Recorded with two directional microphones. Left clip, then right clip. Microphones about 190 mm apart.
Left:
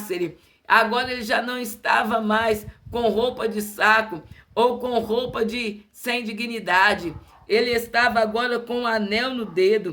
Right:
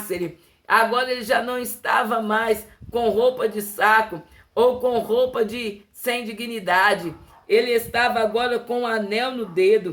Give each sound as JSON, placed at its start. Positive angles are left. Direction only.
{"t": 0.7, "sound": "speech", "side_deg": 10}